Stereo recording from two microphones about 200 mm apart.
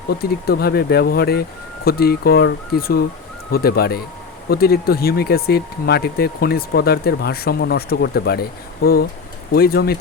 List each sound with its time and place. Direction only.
0.1 s speech: 50° left (ahead or behind)